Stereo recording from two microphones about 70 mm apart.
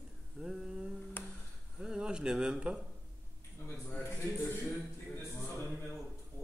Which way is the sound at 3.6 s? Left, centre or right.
Left.